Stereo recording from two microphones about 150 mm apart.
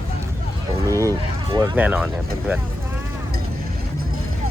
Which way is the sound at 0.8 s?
20° right (ahead or behind).